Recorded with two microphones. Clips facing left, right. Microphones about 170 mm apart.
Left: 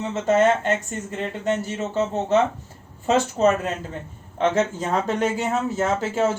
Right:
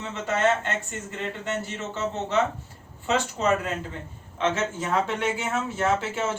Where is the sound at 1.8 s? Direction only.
40° left (ahead or behind).